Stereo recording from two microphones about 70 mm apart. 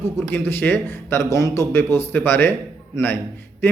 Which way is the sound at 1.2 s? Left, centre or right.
Left.